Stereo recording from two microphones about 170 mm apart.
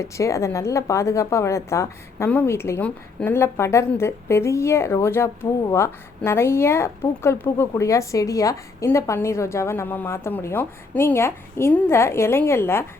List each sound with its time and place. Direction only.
0.0 s speech: 15° left (ahead or behind)